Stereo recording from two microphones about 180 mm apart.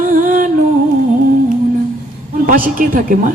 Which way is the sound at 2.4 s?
50° right (ahead or behind).